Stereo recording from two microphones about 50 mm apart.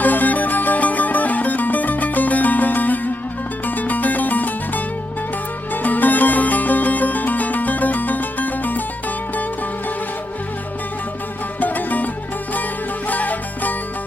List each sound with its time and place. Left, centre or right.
0.0 s music: left
11.6 s music: left
13.1 s music: left